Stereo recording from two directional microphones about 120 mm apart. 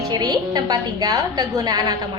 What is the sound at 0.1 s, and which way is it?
A woman's voice, 30° right (ahead or behind).